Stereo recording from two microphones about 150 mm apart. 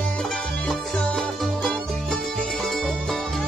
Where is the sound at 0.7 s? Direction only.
Centre (ahead or behind).